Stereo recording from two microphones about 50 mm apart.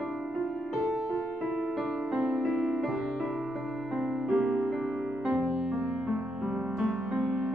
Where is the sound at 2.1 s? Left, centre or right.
Right.